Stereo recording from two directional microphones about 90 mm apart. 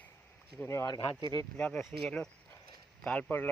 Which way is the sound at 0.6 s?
30° left (ahead or behind).